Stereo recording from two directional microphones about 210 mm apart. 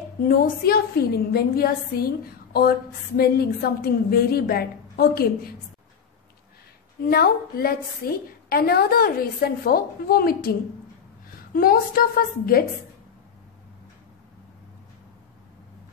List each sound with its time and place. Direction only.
0.6 s a woman's voice: 45° left (ahead or behind)
7.0 s a woman's voice: 45° left (ahead or behind)
11.5 s a woman's voice: 45° left (ahead or behind)